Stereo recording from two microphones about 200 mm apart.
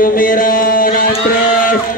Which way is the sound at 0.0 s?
45° left (ahead or behind).